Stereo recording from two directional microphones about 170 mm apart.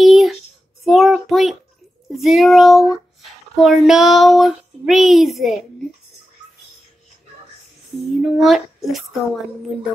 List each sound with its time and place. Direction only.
0.0 s a sound: centre (ahead or behind)
0.8 s child singing: centre (ahead or behind)
2.1 s speech: centre (ahead or behind)
8.1 s speech: centre (ahead or behind)